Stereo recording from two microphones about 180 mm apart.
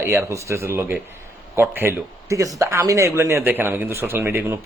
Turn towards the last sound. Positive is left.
turn(degrees=-10)  # may be behind; listen again after turning